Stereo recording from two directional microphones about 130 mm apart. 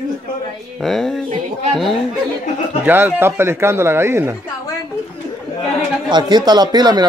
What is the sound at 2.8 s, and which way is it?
Speech, 15° right (ahead or behind).